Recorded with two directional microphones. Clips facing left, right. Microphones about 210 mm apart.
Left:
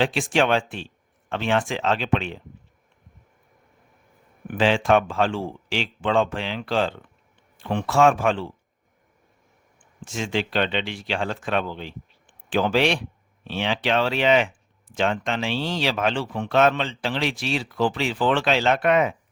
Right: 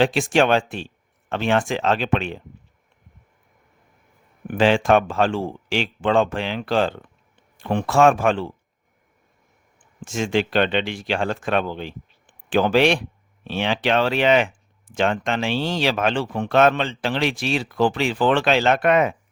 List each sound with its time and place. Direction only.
0.0 s speech: 45° right (ahead or behind)
4.4 s speech: 45° right (ahead or behind)
10.0 s speech: 45° right (ahead or behind)